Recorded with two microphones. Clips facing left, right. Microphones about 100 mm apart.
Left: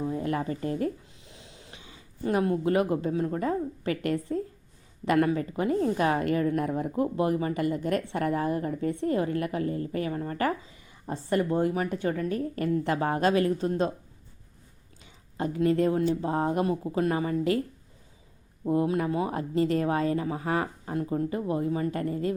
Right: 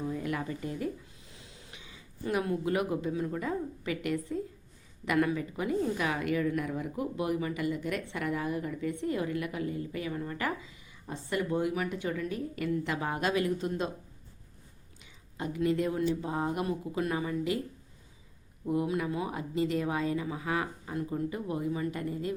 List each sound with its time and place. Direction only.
0.0 s a woman's voice: 30° left (ahead or behind)
0.6 s speech: 50° left (ahead or behind)
1.2 s a woman's voice: 25° left (ahead or behind)
15.0 s a sound: 40° left (ahead or behind)
16.0 s a woman's voice: 40° left (ahead or behind)
18.6 s a woman's voice: 35° left (ahead or behind)
20.9 s a woman's voice: 30° left (ahead or behind); by 22.4 s 50° left (ahead or behind)